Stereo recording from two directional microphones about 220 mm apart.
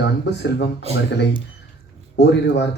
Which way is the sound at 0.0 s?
50° left (ahead or behind).